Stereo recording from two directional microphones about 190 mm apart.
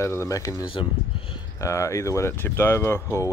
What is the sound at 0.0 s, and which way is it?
Speech, 15° left (ahead or behind).